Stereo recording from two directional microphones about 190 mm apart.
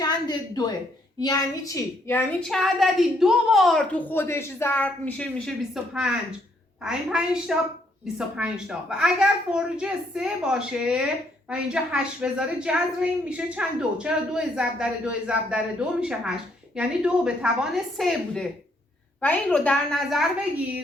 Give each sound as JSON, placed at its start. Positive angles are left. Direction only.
{"t": 0.0, "sound": "a woman's voice", "side_deg": 20}